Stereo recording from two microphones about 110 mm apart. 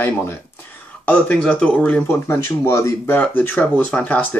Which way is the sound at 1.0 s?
10° left (ahead or behind).